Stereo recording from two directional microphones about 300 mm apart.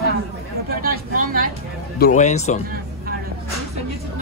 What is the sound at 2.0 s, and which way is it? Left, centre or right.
Speech, left.